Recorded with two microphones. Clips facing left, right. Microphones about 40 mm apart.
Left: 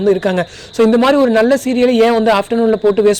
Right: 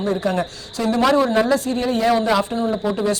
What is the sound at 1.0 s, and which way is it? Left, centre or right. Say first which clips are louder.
Speech: left 5 dB; left.